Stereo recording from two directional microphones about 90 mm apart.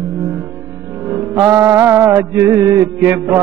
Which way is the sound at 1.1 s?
20° right (ahead or behind).